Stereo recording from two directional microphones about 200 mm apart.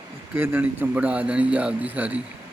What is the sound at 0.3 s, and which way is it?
A man's voice, 10° right (ahead or behind).